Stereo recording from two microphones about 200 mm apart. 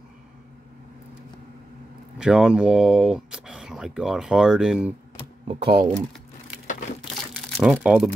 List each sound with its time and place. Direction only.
2.1 s speech: 5° right (ahead or behind)
5.5 s speech: 25° right (ahead or behind)
7.2 s crumpling: centre (ahead or behind)